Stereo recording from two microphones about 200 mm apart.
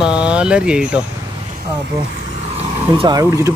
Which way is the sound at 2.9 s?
20° right (ahead or behind).